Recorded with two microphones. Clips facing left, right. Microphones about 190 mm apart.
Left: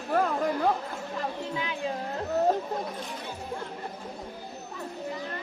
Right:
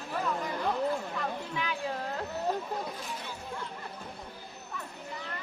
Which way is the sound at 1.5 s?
20° left (ahead or behind).